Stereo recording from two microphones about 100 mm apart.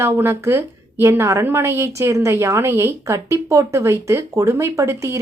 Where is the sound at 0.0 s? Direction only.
25° right (ahead or behind).